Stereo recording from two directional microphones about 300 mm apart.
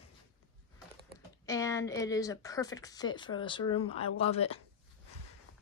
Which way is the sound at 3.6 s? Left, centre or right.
Left.